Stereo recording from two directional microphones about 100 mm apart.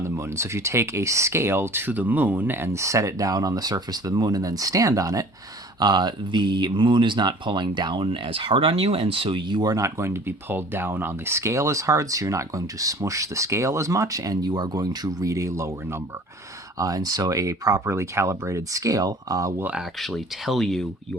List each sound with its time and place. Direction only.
0.0 s speech: 30° right (ahead or behind)
5.8 s speech: 45° right (ahead or behind)
16.7 s speech: 35° right (ahead or behind)
20.0 s speech: centre (ahead or behind)